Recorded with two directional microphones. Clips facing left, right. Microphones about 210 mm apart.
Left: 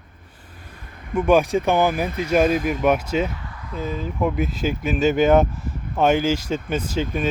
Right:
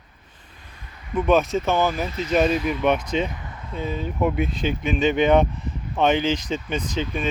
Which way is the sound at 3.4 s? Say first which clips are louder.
Left 1 dB; 25° right (ahead or behind).